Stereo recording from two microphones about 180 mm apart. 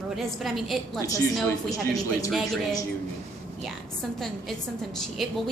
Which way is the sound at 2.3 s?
Centre (ahead or behind).